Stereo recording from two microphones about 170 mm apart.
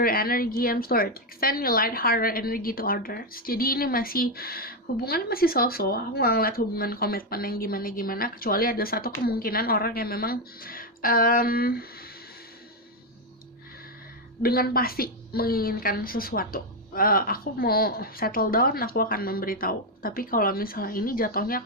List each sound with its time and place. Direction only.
0.0 s a woman's voice: 60° left (ahead or behind)
14.4 s a woman's voice: 60° left (ahead or behind)